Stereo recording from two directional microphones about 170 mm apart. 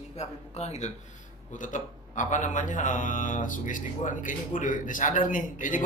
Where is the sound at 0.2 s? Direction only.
40° left (ahead or behind).